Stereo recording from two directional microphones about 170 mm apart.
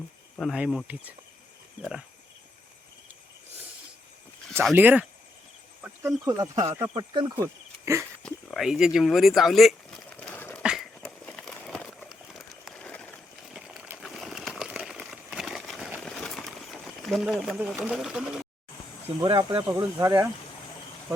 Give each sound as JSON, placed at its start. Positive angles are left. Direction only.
{"t": 0.3, "sound": "speech", "side_deg": 0}
{"t": 4.7, "sound": "speech", "side_deg": -10}
{"t": 6.9, "sound": "speech", "side_deg": -25}
{"t": 7.4, "sound": "a sound", "side_deg": -15}
{"t": 8.2, "sound": "speech", "side_deg": 5}
{"t": 10.6, "sound": "dog", "side_deg": -5}
{"t": 11.0, "sound": "a sound", "side_deg": 5}
{"t": 13.5, "sound": "a sound", "side_deg": -5}
{"t": 19.2, "sound": "speech", "side_deg": -25}